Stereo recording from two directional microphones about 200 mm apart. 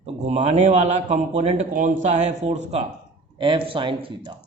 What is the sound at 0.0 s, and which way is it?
A man's voice, 35° right (ahead or behind).